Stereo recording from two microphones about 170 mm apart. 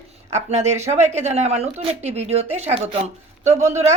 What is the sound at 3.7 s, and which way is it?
Speech, 40° right (ahead or behind).